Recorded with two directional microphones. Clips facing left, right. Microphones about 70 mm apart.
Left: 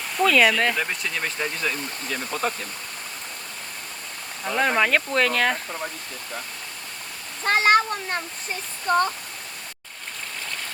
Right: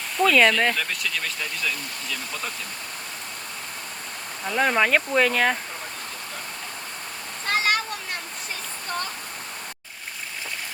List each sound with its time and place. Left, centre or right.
0.2 s speech: centre
0.8 s speech: left
4.4 s speech: centre
7.4 s a sound: left
8.9 s speech: left